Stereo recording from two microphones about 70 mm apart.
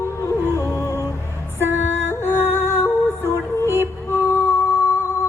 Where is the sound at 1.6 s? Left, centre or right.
Left.